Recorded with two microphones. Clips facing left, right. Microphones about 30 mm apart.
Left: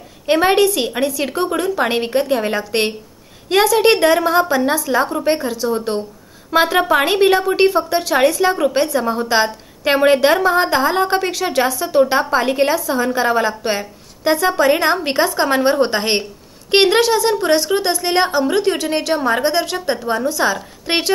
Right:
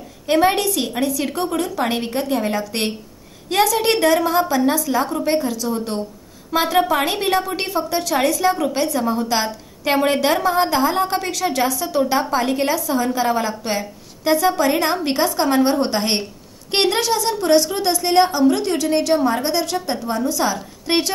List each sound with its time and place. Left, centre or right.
0.3 s a woman's voice: left